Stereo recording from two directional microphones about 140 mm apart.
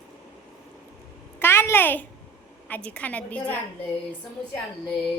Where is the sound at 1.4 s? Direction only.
15° left (ahead or behind).